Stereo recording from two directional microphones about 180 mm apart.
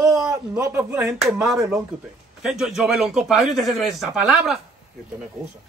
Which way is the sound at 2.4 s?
Centre (ahead or behind).